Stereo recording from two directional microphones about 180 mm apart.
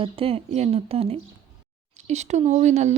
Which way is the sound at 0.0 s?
30° right (ahead or behind).